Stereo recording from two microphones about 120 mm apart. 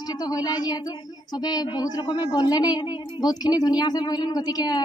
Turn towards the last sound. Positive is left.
turn(degrees=35)  # may be behind; listen again after turning